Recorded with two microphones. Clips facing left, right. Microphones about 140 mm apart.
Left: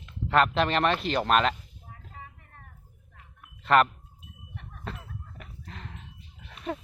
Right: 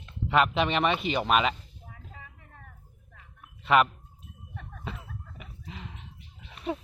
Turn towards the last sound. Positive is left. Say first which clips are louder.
# right 1 dB
turn(degrees=-5)  # may be behind; listen again after turning